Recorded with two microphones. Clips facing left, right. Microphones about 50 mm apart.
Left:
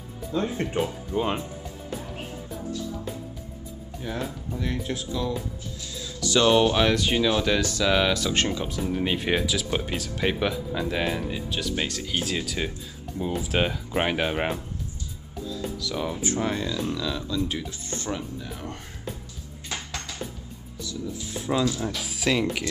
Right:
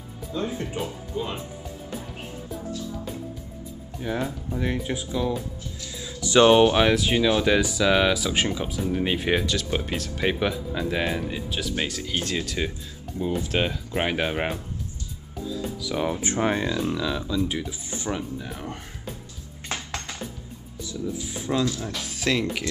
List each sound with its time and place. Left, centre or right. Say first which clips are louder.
0.6 s speech: left 4 dB; left
4.0 s speech: right 4 dB; centre
15.5 s music: right 2 dB; centre
16.3 s speech: right 2 dB; right
16.8 s speech: right 2 dB; centre
19.7 s music: right 2 dB; right
21.5 s speech: left 1 dB; centre